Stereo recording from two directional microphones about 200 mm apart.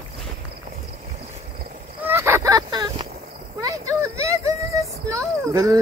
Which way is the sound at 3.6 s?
15° right (ahead or behind).